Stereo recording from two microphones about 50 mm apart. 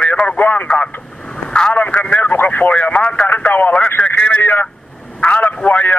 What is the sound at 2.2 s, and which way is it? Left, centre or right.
Speech, left.